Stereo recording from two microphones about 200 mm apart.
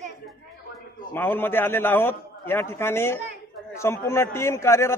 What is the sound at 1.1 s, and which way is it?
A man's voice, 10° left (ahead or behind).